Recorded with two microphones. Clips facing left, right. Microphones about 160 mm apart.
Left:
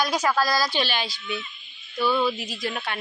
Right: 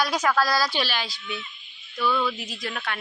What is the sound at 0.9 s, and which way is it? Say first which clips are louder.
Speech: left 2 dB; centre (ahead or behind).